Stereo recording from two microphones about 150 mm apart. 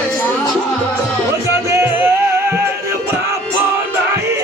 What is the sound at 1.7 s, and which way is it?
Music, 15° right (ahead or behind).